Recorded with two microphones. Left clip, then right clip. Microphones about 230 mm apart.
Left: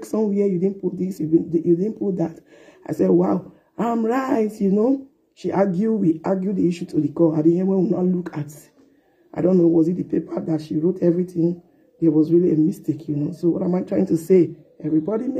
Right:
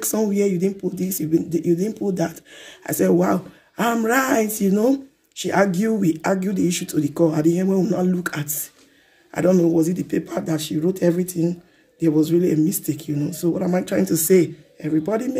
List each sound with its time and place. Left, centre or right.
0.1 s speech: centre
4.0 s a sound: right
4.3 s speech: centre
9.5 s speech: centre